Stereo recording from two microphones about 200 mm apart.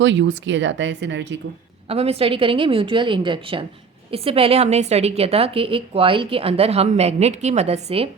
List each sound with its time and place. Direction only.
0.0 s speech: 65° right (ahead or behind)
1.9 s a woman's voice: 30° right (ahead or behind)